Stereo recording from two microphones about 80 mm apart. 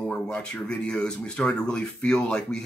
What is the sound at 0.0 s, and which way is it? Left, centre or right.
Speech, centre.